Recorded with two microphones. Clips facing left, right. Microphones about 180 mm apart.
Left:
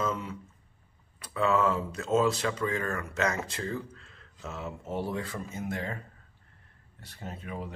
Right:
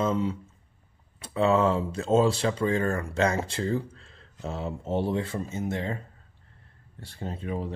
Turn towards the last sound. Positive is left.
turn(degrees=-30)  # may be behind; listen again after turning